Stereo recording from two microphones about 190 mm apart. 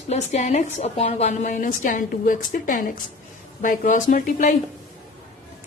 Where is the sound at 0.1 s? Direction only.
35° left (ahead or behind).